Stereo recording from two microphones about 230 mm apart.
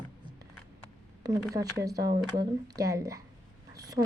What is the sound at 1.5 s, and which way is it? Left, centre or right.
Speech, centre.